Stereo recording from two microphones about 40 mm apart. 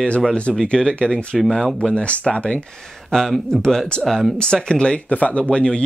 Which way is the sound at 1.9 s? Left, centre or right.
Left.